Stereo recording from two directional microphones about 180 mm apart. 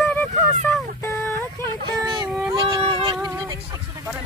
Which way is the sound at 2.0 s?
20° right (ahead or behind).